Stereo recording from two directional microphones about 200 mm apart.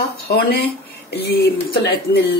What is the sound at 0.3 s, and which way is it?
Speech, 55° left (ahead or behind).